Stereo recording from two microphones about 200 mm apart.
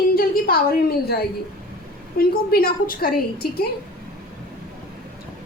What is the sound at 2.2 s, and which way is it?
A woman's voice, 50° left (ahead or behind).